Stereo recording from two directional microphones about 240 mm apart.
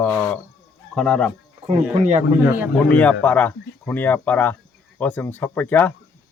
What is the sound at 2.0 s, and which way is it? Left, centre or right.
Speech, right.